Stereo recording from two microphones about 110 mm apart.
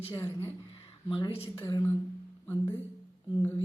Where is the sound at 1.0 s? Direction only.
50° left (ahead or behind).